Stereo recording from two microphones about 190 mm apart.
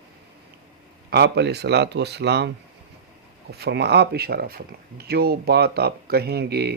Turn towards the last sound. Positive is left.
turn(degrees=-60)  # may be behind; listen again after turning